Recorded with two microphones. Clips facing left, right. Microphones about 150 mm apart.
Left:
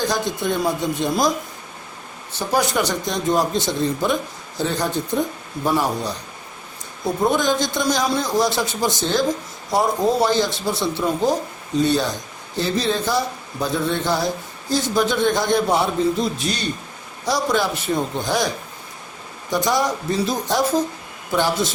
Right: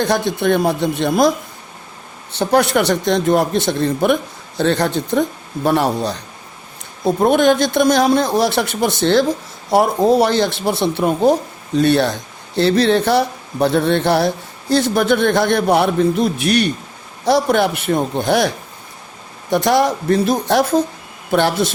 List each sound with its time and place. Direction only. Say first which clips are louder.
0.0 s speech: right 6 dB; 65° right (ahead or behind)
2.4 s speech: right 6 dB; 65° right (ahead or behind)
7.2 s speech: right 6 dB; 65° right (ahead or behind)